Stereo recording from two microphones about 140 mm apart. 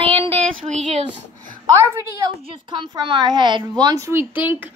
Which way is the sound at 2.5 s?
35° right (ahead or behind).